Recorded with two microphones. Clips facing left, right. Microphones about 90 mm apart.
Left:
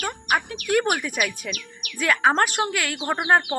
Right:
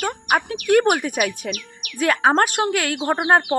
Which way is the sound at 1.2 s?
40° right (ahead or behind).